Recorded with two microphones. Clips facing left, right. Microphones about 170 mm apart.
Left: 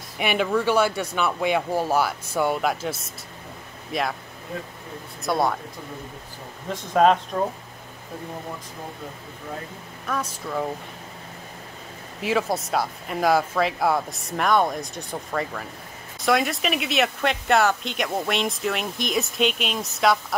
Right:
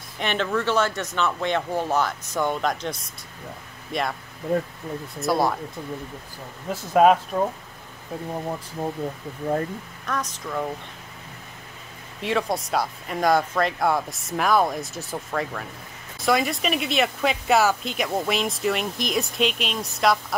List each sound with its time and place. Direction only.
0.2 s speech: 10° left (ahead or behind)
5.2 s speech: centre (ahead or behind)
6.7 s speech: 10° right (ahead or behind)
10.0 s speech: 10° left (ahead or behind)
12.2 s speech: 5° left (ahead or behind)